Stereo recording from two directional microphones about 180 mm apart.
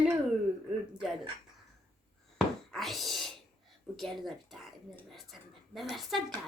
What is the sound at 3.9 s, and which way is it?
Speech, centre (ahead or behind).